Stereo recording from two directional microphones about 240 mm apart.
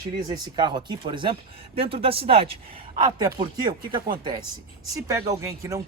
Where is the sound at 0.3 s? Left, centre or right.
Centre.